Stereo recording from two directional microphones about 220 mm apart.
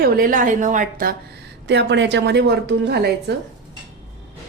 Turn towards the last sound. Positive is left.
turn(degrees=-50)  # may be behind; listen again after turning